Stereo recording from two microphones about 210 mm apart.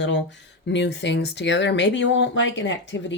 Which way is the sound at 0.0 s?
60° left (ahead or behind).